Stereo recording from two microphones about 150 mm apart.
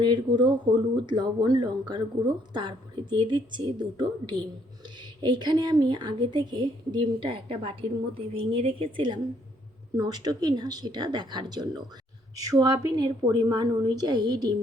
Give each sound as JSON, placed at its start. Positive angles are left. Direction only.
{"t": 0.0, "sound": "a woman's voice", "side_deg": -30}